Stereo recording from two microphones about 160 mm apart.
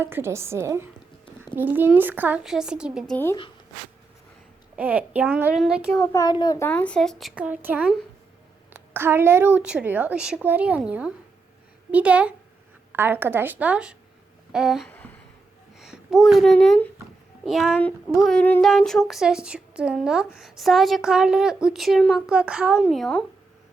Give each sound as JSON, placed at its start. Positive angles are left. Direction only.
{"t": 0.0, "sound": "a woman's voice", "side_deg": -15}
{"t": 3.1, "sound": "speech", "side_deg": 10}
{"t": 4.8, "sound": "a woman's voice", "side_deg": -10}
{"t": 6.0, "sound": "a child's voice", "side_deg": 15}
{"t": 6.7, "sound": "a woman's voice", "side_deg": 10}
{"t": 14.8, "sound": "a sound", "side_deg": 10}
{"t": 15.8, "sound": "a child's voice", "side_deg": 0}
{"t": 17.7, "sound": "a woman's voice", "side_deg": 10}